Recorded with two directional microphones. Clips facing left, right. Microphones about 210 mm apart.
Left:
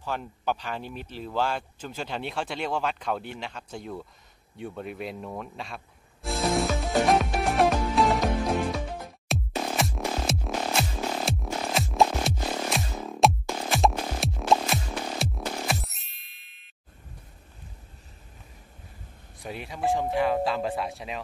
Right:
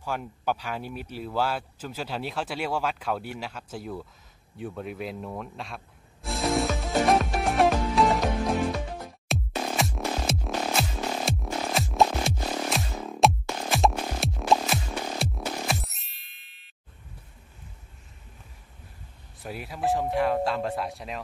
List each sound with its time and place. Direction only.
0.0 s speech: 10° right (ahead or behind)
6.2 s music: centre (ahead or behind)
9.3 s music: centre (ahead or behind)
19.4 s speech: 5° right (ahead or behind)